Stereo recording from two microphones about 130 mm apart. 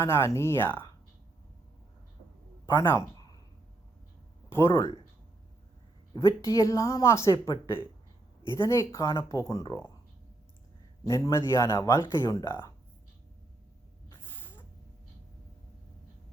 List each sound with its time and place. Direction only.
0.0 s a woman's voice: 20° left (ahead or behind)
2.6 s speech: 20° left (ahead or behind)
4.4 s a sound: 20° left (ahead or behind)
6.4 s a woman's voice: 25° left (ahead or behind)
11.0 s a woman's voice: 25° left (ahead or behind)